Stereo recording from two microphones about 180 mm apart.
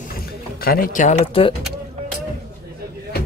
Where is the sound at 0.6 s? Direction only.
50° left (ahead or behind).